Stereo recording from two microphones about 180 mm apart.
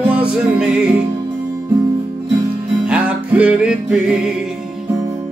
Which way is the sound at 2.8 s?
5° right (ahead or behind).